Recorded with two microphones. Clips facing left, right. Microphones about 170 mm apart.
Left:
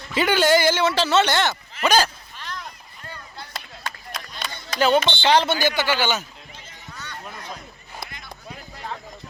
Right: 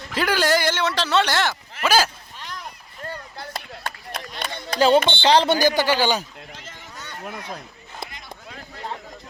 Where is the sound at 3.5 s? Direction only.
55° right (ahead or behind).